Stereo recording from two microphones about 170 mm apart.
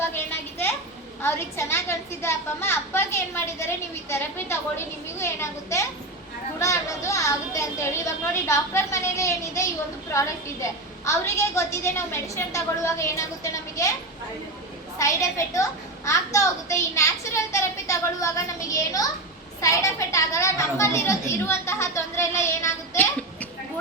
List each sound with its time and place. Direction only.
0.0 s a sound: 10° left (ahead or behind)
1.2 s a woman's voice: 15° left (ahead or behind)
14.9 s a woman's voice: 20° left (ahead or behind)